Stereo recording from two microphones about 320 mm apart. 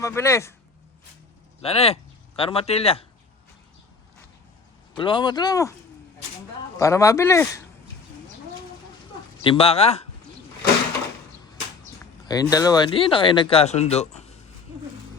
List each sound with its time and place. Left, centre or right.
0.0 s speech: centre
1.6 s speech: centre
4.9 s speech: centre
6.7 s speech: centre
9.4 s speech: centre
12.3 s speech: centre